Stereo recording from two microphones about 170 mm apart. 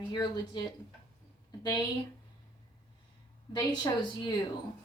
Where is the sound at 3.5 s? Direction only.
25° left (ahead or behind).